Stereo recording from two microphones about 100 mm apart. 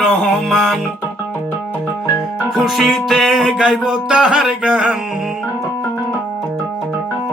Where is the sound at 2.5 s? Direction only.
Centre (ahead or behind).